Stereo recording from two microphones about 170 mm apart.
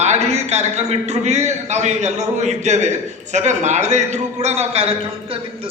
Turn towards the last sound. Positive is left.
turn(degrees=-35)  # may be behind; listen again after turning